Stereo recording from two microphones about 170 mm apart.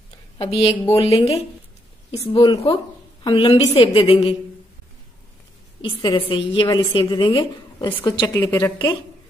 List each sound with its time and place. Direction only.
0.4 s a woman's voice: 35° left (ahead or behind)
5.8 s a woman's voice: 25° left (ahead or behind)